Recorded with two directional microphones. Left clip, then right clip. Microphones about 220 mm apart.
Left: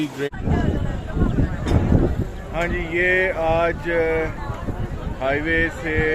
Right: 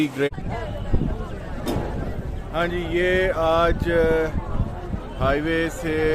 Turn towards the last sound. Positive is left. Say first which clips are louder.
# left 1 dB
turn(degrees=-15)  # may be behind; listen again after turning